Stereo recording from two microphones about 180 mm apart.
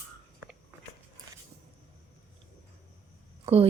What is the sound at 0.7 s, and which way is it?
Biting, 10° right (ahead or behind).